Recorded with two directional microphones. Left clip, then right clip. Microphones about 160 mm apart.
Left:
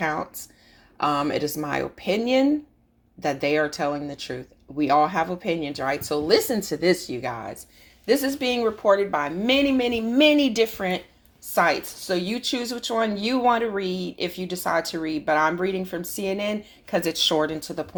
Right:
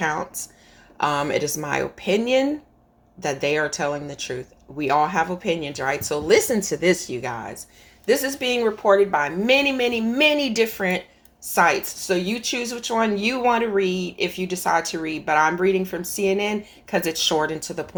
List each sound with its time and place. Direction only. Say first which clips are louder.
0.9 s speech: right 2 dB; 30° left (ahead or behind)
7.1 s speech: right 1 dB; 30° left (ahead or behind)